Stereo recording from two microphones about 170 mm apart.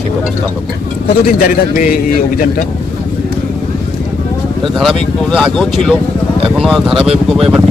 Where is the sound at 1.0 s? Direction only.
55° left (ahead or behind).